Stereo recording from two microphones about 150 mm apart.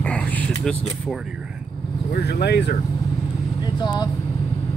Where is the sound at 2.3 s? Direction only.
90° left.